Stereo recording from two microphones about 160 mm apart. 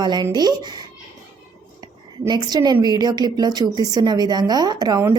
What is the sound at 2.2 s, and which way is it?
A woman's voice, 25° right (ahead or behind).